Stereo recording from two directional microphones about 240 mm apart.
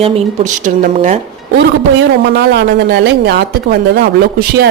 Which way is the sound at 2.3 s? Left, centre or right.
Right.